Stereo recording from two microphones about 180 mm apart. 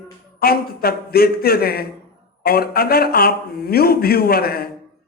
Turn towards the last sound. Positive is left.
turn(degrees=60)  # may be behind; listen again after turning